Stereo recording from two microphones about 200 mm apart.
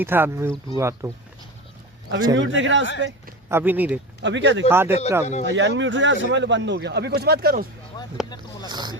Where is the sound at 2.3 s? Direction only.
70° right (ahead or behind).